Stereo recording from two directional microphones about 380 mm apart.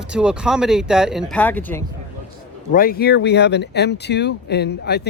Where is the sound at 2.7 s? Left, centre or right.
Left.